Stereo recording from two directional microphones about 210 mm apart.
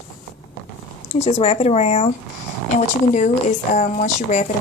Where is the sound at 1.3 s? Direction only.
30° left (ahead or behind).